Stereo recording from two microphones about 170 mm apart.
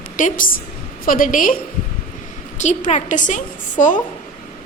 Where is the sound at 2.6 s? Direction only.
45° left (ahead or behind).